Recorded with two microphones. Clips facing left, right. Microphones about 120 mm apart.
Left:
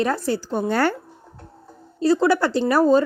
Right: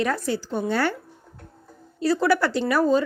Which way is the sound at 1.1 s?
30° left (ahead or behind).